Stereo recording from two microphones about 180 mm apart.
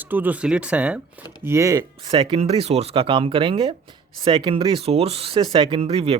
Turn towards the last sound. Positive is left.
turn(degrees=-35)  # may be behind; listen again after turning